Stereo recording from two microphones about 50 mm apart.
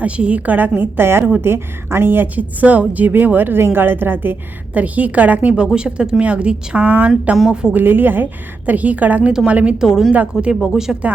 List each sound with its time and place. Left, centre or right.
0.0 s a woman's voice: right
0.8 s a woman's voice: right
4.7 s a woman's voice: right
5.6 s a woman's voice: centre; by 7.1 s right
7.4 s a woman's voice: centre
7.7 s a woman's voice: right
9.7 s speech: centre